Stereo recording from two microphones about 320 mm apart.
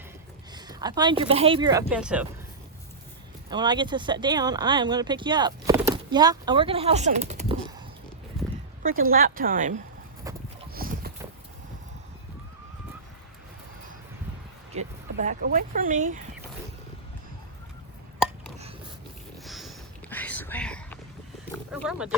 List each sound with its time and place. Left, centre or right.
0.5 s speech: centre
3.5 s speech: centre
8.4 s a sound: centre
8.8 s a woman's voice: right
10.3 s a sound: centre
10.8 s clip-clop: right
14.7 s speech: right
19.5 s whispering: centre
21.7 s speech: centre